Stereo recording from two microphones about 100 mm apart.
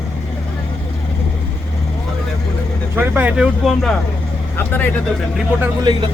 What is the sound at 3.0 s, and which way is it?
Speech, 20° right (ahead or behind).